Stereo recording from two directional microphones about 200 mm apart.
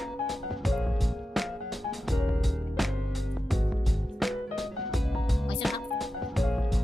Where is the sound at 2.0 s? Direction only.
Centre (ahead or behind).